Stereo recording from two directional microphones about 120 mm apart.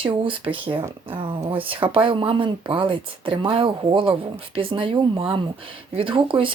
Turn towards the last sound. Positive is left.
turn(degrees=-45)  # may be behind; listen again after turning